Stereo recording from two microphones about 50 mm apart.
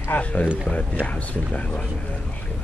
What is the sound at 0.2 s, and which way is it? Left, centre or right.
Speech, left.